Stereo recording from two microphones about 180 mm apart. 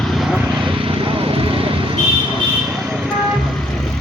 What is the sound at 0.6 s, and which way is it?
Vehicle, 30° right (ahead or behind).